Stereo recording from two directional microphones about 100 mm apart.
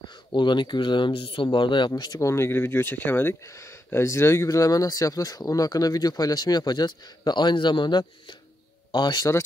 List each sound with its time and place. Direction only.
0.1 s speech: 50° left (ahead or behind)
1.9 s speech: 40° left (ahead or behind)